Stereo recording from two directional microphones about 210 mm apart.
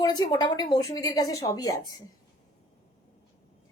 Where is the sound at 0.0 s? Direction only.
20° left (ahead or behind).